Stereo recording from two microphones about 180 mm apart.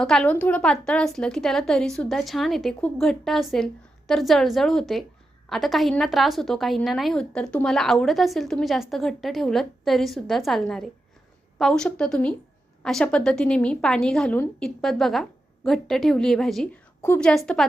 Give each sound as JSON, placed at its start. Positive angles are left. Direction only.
{"t": 0.0, "sound": "a woman's voice", "side_deg": 5}